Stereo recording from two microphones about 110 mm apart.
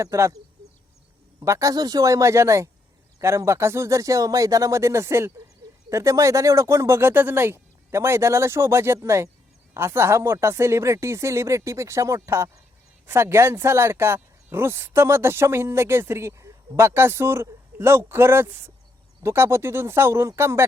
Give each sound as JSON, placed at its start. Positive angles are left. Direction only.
{"t": 0.0, "sound": "speech", "side_deg": -30}
{"t": 1.4, "sound": "speech", "side_deg": -30}